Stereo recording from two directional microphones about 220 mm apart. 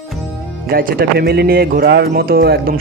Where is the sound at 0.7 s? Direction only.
40° right (ahead or behind).